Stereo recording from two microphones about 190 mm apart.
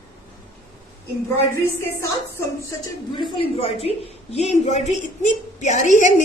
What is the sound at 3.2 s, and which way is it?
A woman's voice, 30° left (ahead or behind).